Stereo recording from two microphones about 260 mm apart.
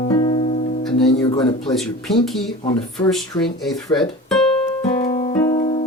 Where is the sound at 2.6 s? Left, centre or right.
Centre.